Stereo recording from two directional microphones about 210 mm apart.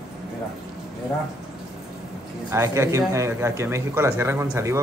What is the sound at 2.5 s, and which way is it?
A man's voice, 15° right (ahead or behind).